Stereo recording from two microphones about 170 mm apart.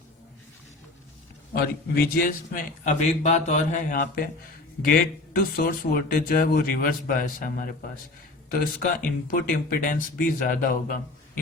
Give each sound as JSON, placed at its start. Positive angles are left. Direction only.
{"t": 1.5, "sound": "a man's voice", "side_deg": 60}